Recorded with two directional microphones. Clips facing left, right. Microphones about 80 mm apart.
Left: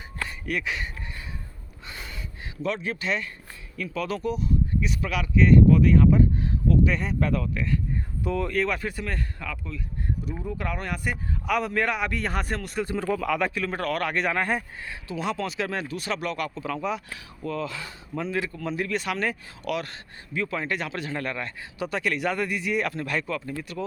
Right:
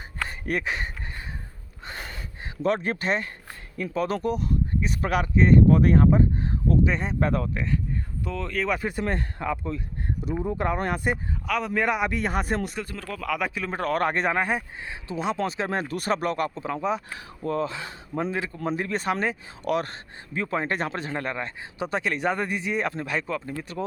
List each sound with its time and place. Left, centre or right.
0.3 s a sound: right
2.6 s speech: right
4.7 s speech: right
8.2 s speech: centre
8.8 s a man's voice: right
11.4 s speech: centre
11.7 s speech: centre
12.8 s speech: left
13.1 s speech: centre
13.5 s a man's voice: centre; by 14.3 s right
14.3 s speech: centre
15.0 s speech: right
18.5 s a man's voice: right